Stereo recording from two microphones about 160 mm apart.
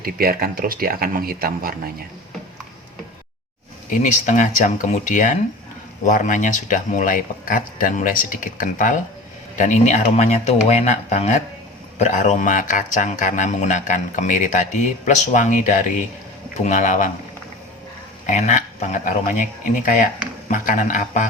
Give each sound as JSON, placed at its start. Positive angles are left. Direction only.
{"t": 0.0, "sound": "speech", "side_deg": -70}
{"t": 3.8, "sound": "speech", "side_deg": 50}
{"t": 18.3, "sound": "speech", "side_deg": 50}